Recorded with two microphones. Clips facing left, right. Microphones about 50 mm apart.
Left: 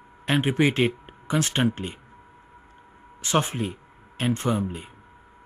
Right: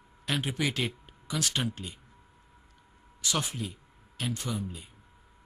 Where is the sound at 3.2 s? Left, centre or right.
Left.